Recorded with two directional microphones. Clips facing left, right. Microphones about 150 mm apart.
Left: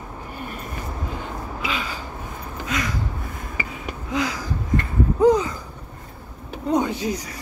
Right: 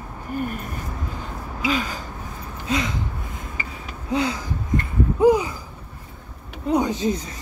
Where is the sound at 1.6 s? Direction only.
40° right (ahead or behind).